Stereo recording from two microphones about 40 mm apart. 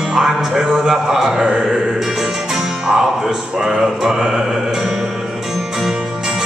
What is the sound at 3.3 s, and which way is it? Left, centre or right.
Speech, centre.